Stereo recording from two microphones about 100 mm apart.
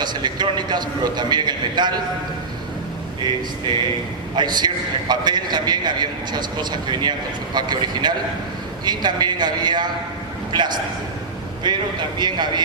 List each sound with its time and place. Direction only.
0.0 s a man's voice: 45° right (ahead or behind)
4.4 s a man's voice: 45° right (ahead or behind)